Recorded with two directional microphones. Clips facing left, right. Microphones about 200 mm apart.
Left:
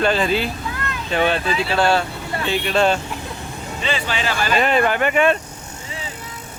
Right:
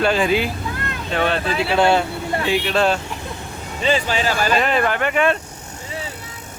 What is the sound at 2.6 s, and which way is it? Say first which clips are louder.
Speech: left 3 dB; centre (ahead or behind).